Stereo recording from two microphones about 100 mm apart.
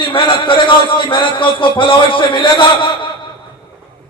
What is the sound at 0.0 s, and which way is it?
A man's voice, 60° left (ahead or behind).